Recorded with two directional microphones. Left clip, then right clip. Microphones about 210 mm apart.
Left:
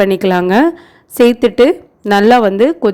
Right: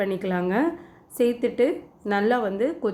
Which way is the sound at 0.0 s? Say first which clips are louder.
Left 14 dB; 50° left (ahead or behind).